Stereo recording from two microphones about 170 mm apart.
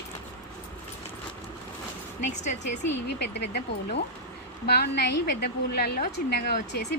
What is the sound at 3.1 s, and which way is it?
Speech, 90° left.